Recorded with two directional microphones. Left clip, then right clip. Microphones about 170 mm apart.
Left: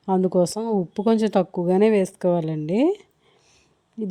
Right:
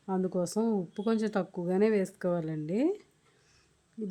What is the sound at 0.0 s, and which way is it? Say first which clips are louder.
A woman's voice: left 12 dB; 40° left (ahead or behind).